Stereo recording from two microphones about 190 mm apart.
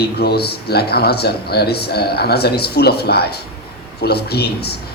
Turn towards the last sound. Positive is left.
turn(degrees=55)  # may be behind; listen again after turning